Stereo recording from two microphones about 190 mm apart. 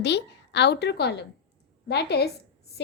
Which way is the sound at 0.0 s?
65° left (ahead or behind).